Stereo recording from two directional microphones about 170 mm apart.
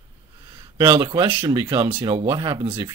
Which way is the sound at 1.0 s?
30° right (ahead or behind).